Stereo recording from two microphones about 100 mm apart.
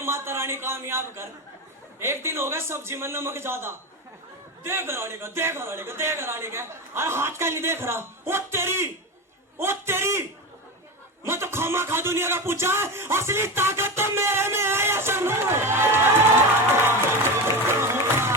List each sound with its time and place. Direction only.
0.0 s speech: 25° right (ahead or behind)
16.8 s music: 25° right (ahead or behind)